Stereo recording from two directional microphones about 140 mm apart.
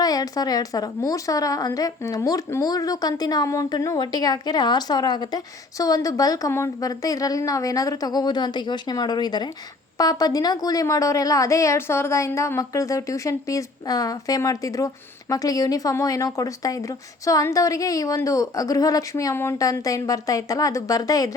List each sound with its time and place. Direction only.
0.0 s speech: 25° left (ahead or behind)